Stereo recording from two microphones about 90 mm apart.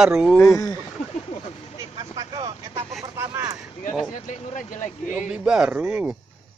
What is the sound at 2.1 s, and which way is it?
Speech, 55° right (ahead or behind).